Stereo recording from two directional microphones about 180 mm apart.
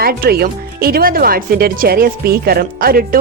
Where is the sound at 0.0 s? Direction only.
60° right (ahead or behind).